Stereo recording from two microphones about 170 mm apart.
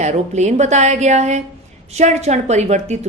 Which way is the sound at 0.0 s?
45° right (ahead or behind).